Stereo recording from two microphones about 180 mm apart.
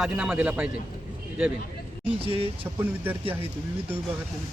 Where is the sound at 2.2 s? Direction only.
30° right (ahead or behind).